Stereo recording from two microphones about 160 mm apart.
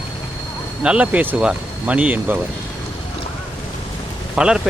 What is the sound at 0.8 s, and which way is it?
Speech, 5° right (ahead or behind).